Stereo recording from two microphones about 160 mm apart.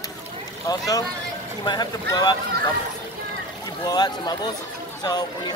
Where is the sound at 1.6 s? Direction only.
25° left (ahead or behind).